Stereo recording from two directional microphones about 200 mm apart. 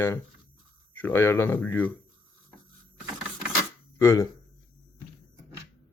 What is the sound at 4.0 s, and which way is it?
Speech, 15° left (ahead or behind).